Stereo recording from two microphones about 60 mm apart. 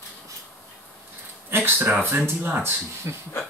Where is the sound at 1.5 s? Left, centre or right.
Right.